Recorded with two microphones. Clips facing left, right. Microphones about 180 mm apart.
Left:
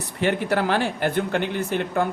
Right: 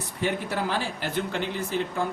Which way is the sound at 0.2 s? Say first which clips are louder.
Left 6 dB; 70° left (ahead or behind).